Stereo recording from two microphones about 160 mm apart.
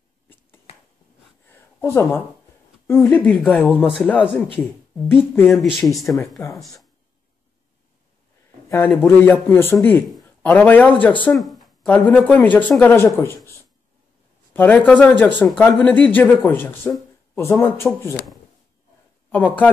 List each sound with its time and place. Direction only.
2.0 s a man's voice: 15° left (ahead or behind)
5.5 s a man's voice: centre (ahead or behind)
5.9 s speech: 20° left (ahead or behind)
6.6 s a man's voice: centre (ahead or behind)
8.6 s a man's voice: 10° left (ahead or behind)
14.5 s speech: 10° left (ahead or behind)
19.3 s speech: 10° left (ahead or behind)